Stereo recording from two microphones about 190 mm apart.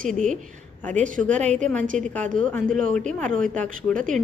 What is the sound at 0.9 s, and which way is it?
Speech, 40° right (ahead or behind).